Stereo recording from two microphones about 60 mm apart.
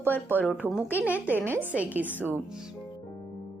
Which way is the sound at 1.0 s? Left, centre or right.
Right.